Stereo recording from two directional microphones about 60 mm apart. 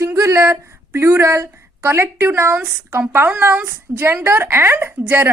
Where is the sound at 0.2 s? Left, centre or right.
Right.